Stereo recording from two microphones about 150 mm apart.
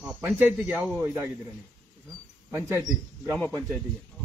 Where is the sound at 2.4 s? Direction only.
20° right (ahead or behind).